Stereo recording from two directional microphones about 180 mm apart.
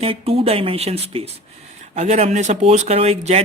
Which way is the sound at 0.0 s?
35° right (ahead or behind).